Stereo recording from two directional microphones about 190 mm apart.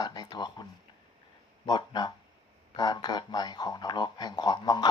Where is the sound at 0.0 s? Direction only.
20° left (ahead or behind).